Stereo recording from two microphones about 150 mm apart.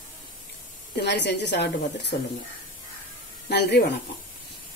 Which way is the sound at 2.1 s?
85° left.